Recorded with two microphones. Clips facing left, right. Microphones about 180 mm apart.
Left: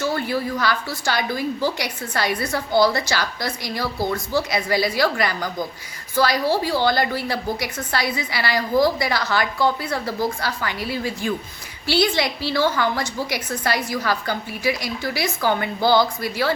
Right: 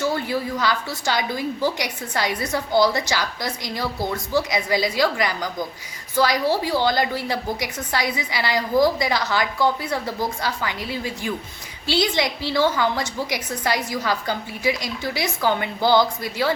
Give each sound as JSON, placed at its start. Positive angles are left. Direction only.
{"t": 0.0, "sound": "a woman's voice", "side_deg": -15}